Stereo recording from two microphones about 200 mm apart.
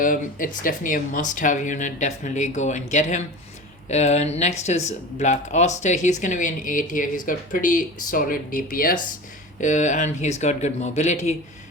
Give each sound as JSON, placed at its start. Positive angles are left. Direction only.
{"t": 0.0, "sound": "speech", "side_deg": 45}